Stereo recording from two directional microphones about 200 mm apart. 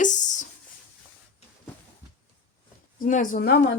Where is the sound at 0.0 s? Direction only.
40° left (ahead or behind).